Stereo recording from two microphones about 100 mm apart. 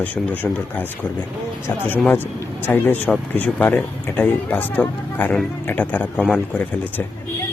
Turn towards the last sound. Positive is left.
turn(degrees=15)  # may be behind; listen again after turning